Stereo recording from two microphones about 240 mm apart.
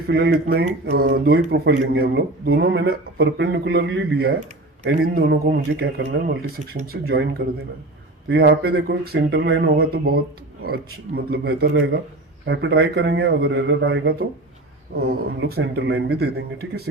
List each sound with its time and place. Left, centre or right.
0.1 s speech: right